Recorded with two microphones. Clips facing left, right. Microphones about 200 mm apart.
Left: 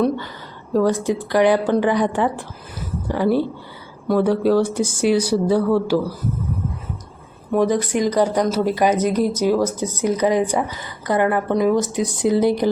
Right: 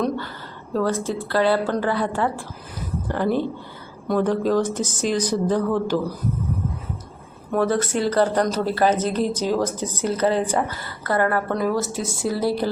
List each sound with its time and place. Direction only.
0.7 s speech: 15° left (ahead or behind)
7.5 s speech: 15° left (ahead or behind)